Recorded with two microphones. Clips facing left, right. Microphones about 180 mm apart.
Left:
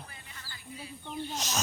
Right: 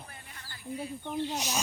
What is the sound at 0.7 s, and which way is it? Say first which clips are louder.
Speech: right 7 dB; 55° right (ahead or behind).